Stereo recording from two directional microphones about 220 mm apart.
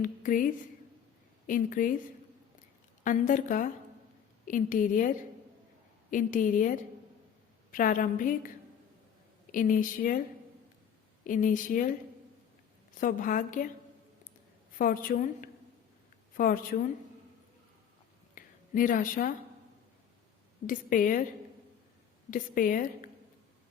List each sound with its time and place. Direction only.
0.0 s speech: 35° left (ahead or behind)
1.5 s a woman's voice: 40° left (ahead or behind)
3.0 s a woman's voice: 35° left (ahead or behind)
11.2 s a woman's voice: 35° left (ahead or behind)
13.0 s a woman's voice: 40° left (ahead or behind)
14.8 s a woman's voice: 40° left (ahead or behind)
18.3 s a sound: 40° left (ahead or behind)
20.7 s a woman's voice: 40° left (ahead or behind)
22.3 s a woman's voice: 40° left (ahead or behind)